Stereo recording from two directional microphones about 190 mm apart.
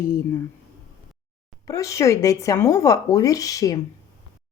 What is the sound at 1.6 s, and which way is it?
Speech, 15° left (ahead or behind).